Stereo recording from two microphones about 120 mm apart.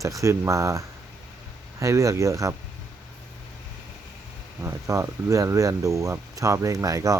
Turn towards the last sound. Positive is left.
turn(degrees=-30)  # may be behind; listen again after turning